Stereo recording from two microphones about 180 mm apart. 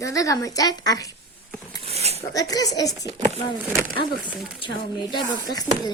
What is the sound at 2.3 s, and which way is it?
Speech, 20° left (ahead or behind).